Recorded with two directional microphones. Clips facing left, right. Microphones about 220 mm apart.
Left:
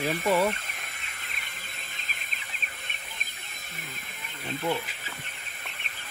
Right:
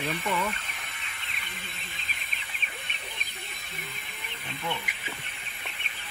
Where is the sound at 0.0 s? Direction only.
45° left (ahead or behind).